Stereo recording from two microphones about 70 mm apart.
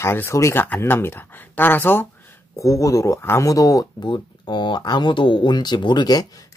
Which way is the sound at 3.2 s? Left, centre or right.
Left.